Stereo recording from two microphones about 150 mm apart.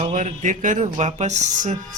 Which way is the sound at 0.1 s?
60° right (ahead or behind).